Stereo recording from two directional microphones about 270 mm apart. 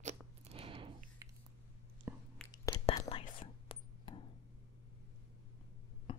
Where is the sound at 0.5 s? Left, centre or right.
Centre.